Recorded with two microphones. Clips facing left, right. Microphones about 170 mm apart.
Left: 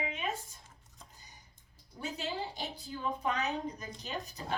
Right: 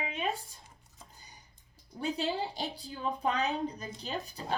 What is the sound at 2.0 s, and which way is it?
A woman's voice, 35° right (ahead or behind).